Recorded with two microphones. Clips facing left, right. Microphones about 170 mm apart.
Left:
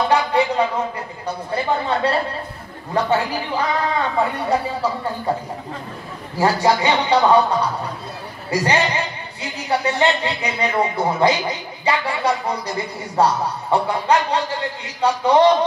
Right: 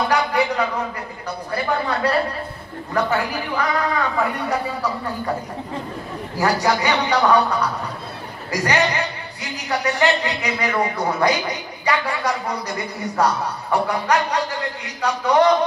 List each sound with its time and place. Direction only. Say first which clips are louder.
0.1 s a sound: left 2 dB; 30° left (ahead or behind)
1.2 s a man's voice: left 2 dB; 30° left (ahead or behind)
6.3 s a man's voice: left 2 dB; 30° left (ahead or behind)
8.5 s a man's voice: left 1 dB; 30° left (ahead or behind)